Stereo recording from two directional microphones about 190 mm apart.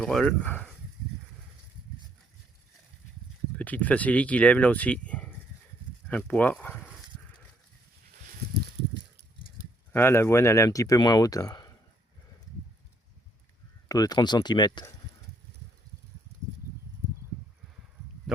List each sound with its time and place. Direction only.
0.0 s speech: 5° left (ahead or behind)
3.6 s speech: 10° left (ahead or behind)
6.1 s a sound: 5° left (ahead or behind)
9.9 s speech: 10° left (ahead or behind)
13.8 s speech: 20° left (ahead or behind)
18.3 s a sound: centre (ahead or behind)